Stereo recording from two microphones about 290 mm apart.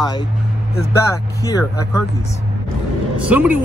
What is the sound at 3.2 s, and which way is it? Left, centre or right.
Speech, centre.